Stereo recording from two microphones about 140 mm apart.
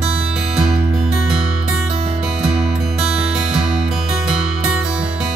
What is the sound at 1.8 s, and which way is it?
Music, 45° right (ahead or behind).